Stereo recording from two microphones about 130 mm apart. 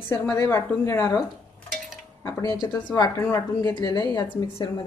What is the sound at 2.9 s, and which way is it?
A woman's voice, 30° left (ahead or behind).